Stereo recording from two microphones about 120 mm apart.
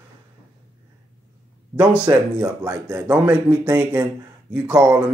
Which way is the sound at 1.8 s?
10° right (ahead or behind).